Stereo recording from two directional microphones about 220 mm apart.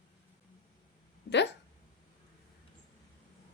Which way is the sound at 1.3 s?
50° left (ahead or behind).